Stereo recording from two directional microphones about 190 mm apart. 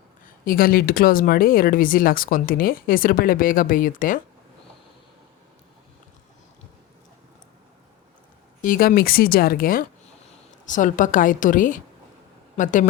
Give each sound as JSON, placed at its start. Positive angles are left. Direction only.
{"t": 0.3, "sound": "speech", "side_deg": 50}
{"t": 8.6, "sound": "speech", "side_deg": 45}